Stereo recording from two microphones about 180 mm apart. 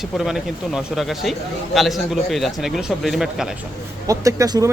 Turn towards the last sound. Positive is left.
turn(degrees=-20)  # may be behind; listen again after turning